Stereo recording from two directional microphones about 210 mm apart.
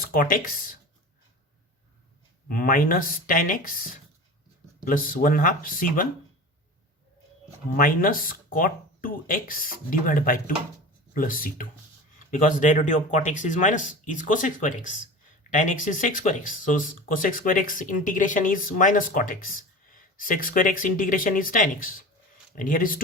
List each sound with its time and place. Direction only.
0.0 s speech: 40° left (ahead or behind)
2.5 s speech: 40° left (ahead or behind)
4.9 s speech: 40° left (ahead or behind)
7.8 s speech: 40° left (ahead or behind)